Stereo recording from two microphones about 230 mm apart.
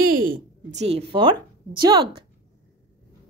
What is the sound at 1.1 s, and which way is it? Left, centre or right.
Speech, right.